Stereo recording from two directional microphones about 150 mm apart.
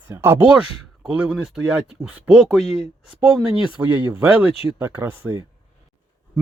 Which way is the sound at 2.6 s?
45° left (ahead or behind).